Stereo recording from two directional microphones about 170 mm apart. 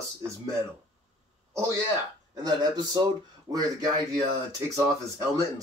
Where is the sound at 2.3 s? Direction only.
25° right (ahead or behind).